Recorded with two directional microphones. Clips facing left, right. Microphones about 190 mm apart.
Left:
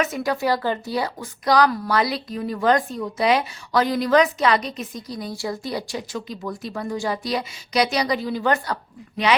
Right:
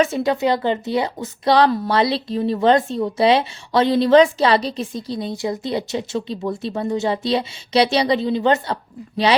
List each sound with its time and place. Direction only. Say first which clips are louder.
0.0 s a woman's voice: right 5 dB; 25° right (ahead or behind)